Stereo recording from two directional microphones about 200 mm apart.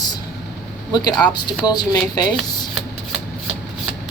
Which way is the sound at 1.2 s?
20° left (ahead or behind).